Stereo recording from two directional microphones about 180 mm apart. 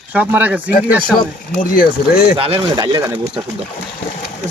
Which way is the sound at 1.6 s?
55° left (ahead or behind).